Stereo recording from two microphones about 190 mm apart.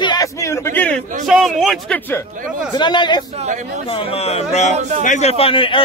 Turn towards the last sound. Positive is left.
turn(degrees=25)  # may be behind; listen again after turning